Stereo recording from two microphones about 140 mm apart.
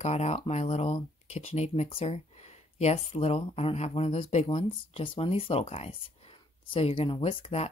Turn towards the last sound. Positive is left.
turn(degrees=45)  # may be behind; listen again after turning